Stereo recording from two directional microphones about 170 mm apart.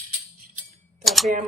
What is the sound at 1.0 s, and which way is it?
Typing, centre (ahead or behind).